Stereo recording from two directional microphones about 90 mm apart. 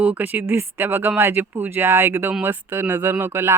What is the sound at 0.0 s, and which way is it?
Speech, 20° right (ahead or behind).